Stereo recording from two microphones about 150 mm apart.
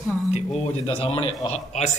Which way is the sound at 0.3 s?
40° left (ahead or behind).